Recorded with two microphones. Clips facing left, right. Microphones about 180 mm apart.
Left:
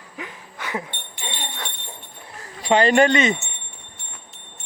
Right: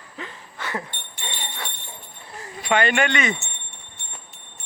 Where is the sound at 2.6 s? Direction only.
35° left (ahead or behind).